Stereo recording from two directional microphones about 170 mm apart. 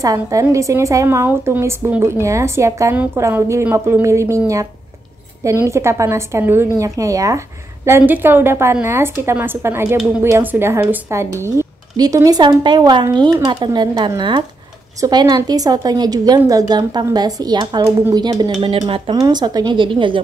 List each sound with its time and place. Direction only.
0.0 s a woman's voice: 20° right (ahead or behind)